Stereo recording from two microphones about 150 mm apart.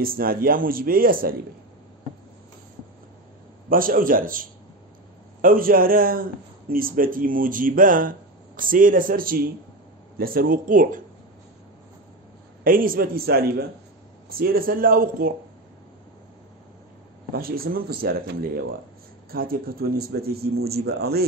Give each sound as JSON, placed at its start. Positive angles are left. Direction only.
{"t": 0.0, "sound": "a man's voice", "side_deg": -75}
{"t": 3.6, "sound": "a man's voice", "side_deg": -70}
{"t": 12.6, "sound": "a man's voice", "side_deg": -70}
{"t": 17.3, "sound": "speech", "side_deg": -80}